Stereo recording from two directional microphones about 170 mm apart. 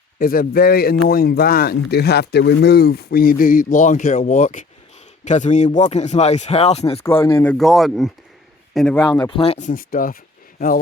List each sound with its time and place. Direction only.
0.2 s speech: 60° left (ahead or behind); by 7.0 s 35° left (ahead or behind)
7.0 s speech: 15° left (ahead or behind)
7.5 s a man's voice: centre (ahead or behind)
9.3 s speech: 35° left (ahead or behind)
9.6 s speech: 55° left (ahead or behind)